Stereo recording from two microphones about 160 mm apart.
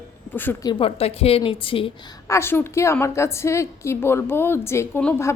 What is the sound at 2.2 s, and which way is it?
Speech, 15° left (ahead or behind).